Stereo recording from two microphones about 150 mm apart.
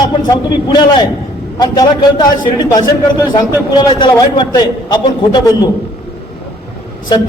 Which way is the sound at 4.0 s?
30° left (ahead or behind).